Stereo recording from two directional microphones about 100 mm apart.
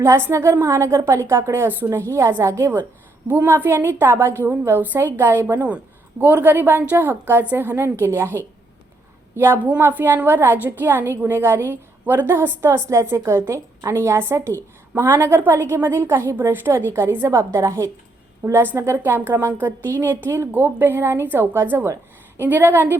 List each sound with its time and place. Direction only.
0.0 s a woman's voice: 30° right (ahead or behind)